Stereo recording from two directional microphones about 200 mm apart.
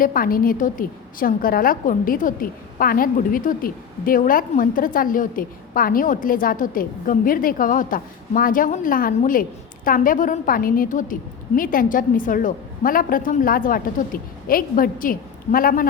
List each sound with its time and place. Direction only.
0.0 s a woman's voice: 45° left (ahead or behind)